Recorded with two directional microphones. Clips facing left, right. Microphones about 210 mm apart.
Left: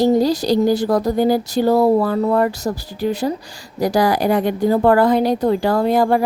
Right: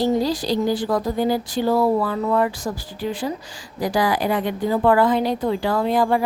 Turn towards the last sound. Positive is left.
turn(degrees=45)  # may be behind; listen again after turning